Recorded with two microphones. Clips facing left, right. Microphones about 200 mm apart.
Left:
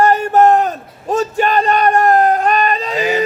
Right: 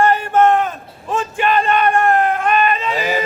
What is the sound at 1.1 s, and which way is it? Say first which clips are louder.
Bellow: left 3 dB; 40° left (ahead or behind).